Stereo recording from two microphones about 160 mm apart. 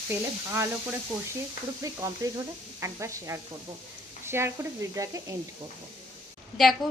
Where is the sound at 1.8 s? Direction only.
20° right (ahead or behind).